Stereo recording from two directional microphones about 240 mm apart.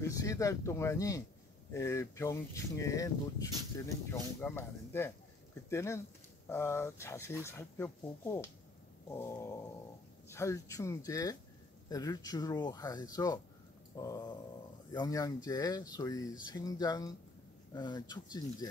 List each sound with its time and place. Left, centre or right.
0.0 s speech: centre